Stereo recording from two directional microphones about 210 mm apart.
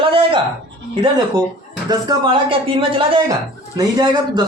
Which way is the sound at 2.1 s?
25° right (ahead or behind).